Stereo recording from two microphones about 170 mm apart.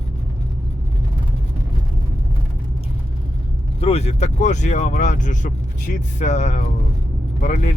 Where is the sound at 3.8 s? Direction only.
35° left (ahead or behind).